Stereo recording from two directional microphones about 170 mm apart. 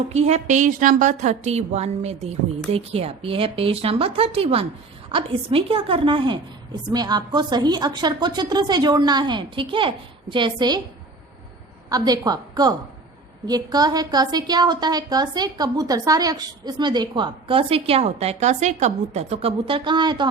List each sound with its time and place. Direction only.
0.1 s a woman's voice: 40° right (ahead or behind)
11.9 s a woman's voice: 20° right (ahead or behind)